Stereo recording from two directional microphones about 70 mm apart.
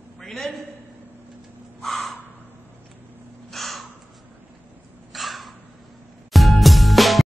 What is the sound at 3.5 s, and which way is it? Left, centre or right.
Crow, centre.